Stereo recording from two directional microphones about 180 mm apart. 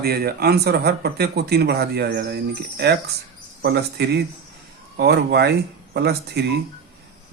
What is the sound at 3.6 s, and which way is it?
Speech, 65° right (ahead or behind).